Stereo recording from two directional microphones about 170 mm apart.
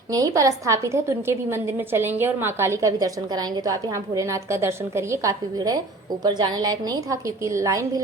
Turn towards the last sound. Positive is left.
turn(degrees=-20)  # may be behind; listen again after turning